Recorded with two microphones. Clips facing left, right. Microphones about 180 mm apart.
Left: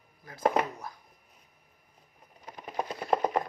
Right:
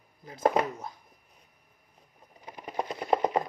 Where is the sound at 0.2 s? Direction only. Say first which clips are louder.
Right 2 dB; 20° right (ahead or behind).